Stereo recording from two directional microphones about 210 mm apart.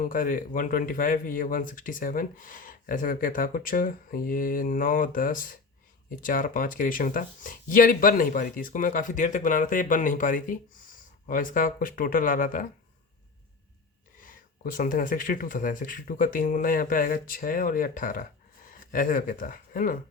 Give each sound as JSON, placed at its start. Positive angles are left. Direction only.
{"t": 0.0, "sound": "speech", "side_deg": 40}
{"t": 14.2, "sound": "speech", "side_deg": 40}